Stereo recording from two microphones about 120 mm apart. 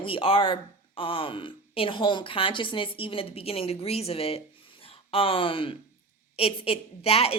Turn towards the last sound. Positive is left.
turn(degrees=55)  # may be behind; listen again after turning